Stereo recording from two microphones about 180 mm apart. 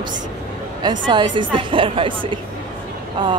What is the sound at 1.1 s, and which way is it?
A woman's voice, 25° right (ahead or behind).